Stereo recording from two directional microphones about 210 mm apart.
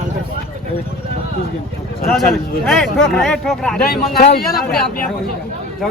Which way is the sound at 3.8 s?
45° left (ahead or behind).